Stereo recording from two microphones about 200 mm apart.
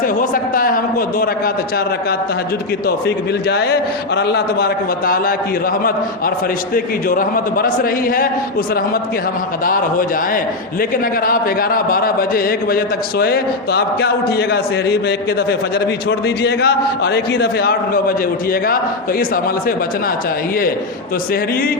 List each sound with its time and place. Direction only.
0.0 s a sound: 45° left (ahead or behind)
3.5 s a man's voice: 55° left (ahead or behind)
6.7 s a man's voice: 45° left (ahead or behind)
9.6 s a man's voice: 45° left (ahead or behind)
16.0 s a man's voice: 55° left (ahead or behind)